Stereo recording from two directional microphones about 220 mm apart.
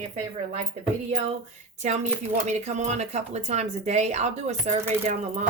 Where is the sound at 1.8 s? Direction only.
30° right (ahead or behind).